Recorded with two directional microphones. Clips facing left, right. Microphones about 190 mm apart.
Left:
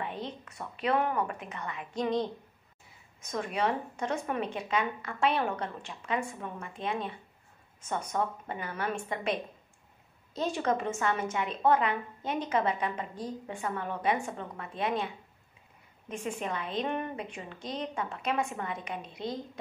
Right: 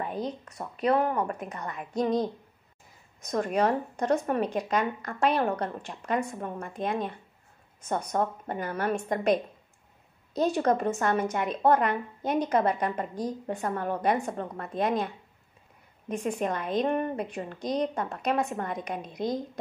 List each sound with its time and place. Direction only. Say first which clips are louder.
0.0 s a woman's voice: right 5 dB; 40° right (ahead or behind)
16.1 s speech: right 6 dB; 40° right (ahead or behind)